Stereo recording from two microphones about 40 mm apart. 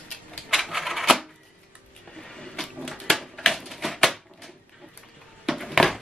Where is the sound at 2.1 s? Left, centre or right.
Centre.